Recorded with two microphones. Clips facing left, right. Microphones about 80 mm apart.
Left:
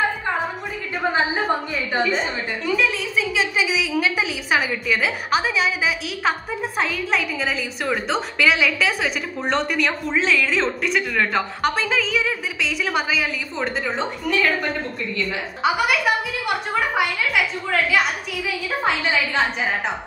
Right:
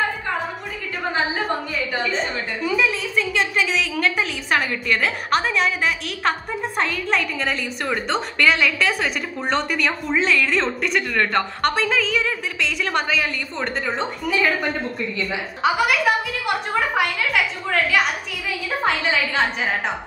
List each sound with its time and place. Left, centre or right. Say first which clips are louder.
2.0 s a woman's voice: left 4 dB; centre